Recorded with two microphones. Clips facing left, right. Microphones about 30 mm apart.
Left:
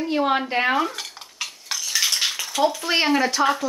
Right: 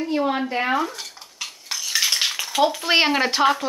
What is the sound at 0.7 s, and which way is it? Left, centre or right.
Dishes, centre.